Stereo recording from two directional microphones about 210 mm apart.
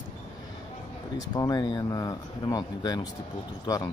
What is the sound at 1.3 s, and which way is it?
Speech, 20° left (ahead or behind).